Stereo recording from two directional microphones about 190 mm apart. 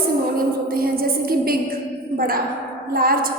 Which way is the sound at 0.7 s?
50° right (ahead or behind).